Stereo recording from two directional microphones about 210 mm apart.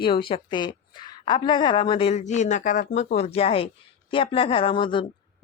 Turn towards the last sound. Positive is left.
turn(degrees=25)  # may be behind; listen again after turning